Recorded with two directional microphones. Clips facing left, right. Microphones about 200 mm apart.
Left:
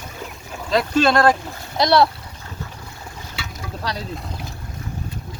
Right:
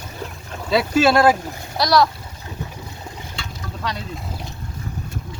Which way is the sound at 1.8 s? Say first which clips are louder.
Left 1 dB; 30° left (ahead or behind).